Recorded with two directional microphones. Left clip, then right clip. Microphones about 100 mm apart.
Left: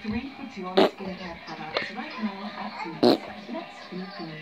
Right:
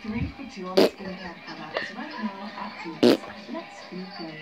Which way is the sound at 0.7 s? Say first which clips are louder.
Right 1 dB; 90° right.